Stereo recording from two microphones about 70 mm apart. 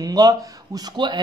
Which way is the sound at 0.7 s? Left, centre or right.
Right.